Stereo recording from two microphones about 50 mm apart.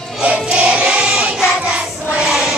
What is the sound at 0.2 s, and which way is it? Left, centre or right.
Choir, right.